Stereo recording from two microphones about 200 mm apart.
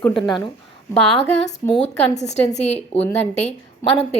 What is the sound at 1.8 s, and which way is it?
A woman's voice, 35° left (ahead or behind).